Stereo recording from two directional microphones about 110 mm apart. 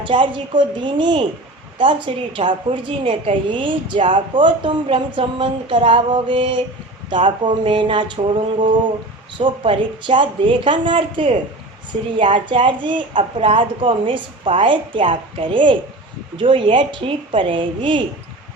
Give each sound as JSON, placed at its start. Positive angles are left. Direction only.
{"t": 0.0, "sound": "a woman's voice", "side_deg": -50}